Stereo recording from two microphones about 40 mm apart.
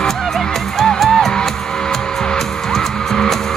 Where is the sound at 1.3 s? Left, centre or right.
Centre.